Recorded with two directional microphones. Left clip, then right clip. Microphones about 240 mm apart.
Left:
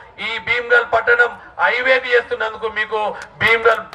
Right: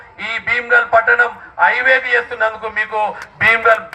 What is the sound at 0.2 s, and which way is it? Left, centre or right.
A man's voice, left.